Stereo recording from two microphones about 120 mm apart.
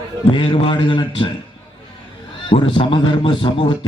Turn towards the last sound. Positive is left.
turn(degrees=40)  # may be behind; listen again after turning